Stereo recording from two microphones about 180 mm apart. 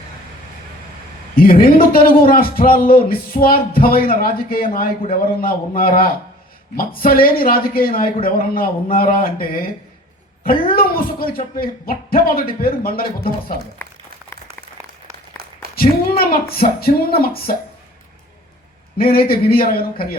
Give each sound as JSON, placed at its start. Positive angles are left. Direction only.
{"t": 1.5, "sound": "speech", "side_deg": 55}
{"t": 10.8, "sound": "speech", "side_deg": 55}
{"t": 15.7, "sound": "speech", "side_deg": 55}
{"t": 18.9, "sound": "speech", "side_deg": 55}